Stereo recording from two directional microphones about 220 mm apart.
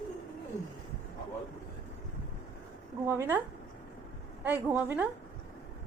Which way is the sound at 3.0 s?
10° right (ahead or behind).